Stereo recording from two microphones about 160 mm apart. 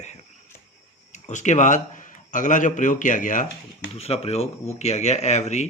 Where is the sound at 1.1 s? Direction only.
50° left (ahead or behind).